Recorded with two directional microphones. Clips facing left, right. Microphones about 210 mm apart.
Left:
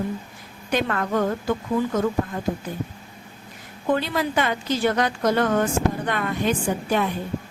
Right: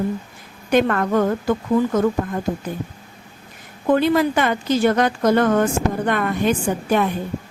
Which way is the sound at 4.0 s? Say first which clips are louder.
Right 7 dB; 50° right (ahead or behind).